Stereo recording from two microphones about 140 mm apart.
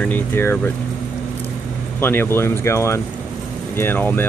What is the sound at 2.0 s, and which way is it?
Speech, 15° left (ahead or behind).